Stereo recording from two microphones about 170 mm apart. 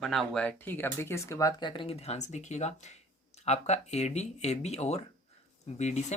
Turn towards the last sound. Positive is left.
turn(degrees=40)  # may be behind; listen again after turning